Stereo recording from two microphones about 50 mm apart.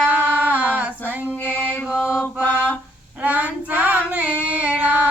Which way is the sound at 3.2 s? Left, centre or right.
Right.